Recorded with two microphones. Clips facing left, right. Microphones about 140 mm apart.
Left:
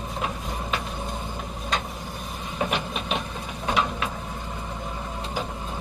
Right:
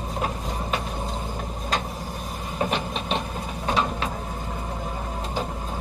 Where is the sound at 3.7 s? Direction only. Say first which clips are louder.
Right 1 dB; 30° right (ahead or behind).